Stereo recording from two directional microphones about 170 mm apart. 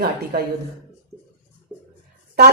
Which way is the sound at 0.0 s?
65° right (ahead or behind).